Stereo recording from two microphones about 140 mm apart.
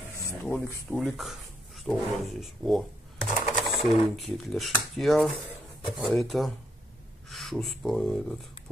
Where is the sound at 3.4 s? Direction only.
50° left (ahead or behind).